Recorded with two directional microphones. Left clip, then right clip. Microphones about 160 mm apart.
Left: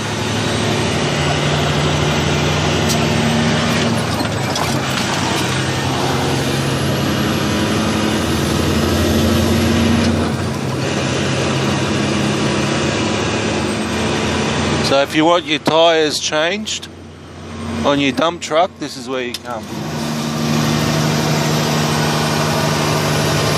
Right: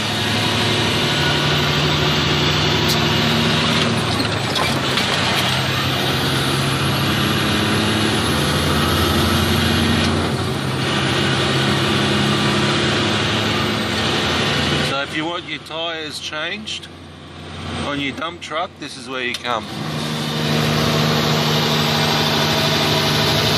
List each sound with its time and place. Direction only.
15.0 s speech: 35° left (ahead or behind)
17.8 s speech: 35° left (ahead or behind)